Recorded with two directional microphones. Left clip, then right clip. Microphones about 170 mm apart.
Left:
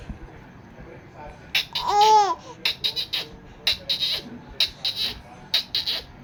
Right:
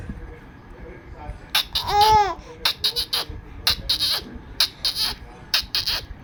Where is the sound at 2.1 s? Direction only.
15° left (ahead or behind).